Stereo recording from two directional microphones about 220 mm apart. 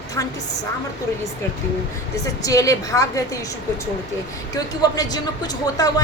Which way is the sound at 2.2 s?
15° left (ahead or behind).